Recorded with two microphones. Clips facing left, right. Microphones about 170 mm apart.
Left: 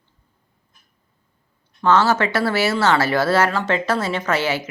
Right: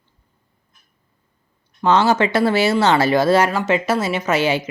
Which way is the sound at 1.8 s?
15° right (ahead or behind).